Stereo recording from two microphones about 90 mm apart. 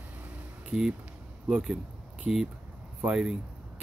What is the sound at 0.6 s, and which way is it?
Speech, 5° right (ahead or behind).